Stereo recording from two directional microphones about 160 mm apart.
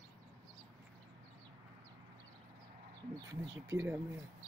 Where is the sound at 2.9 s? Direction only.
25° right (ahead or behind).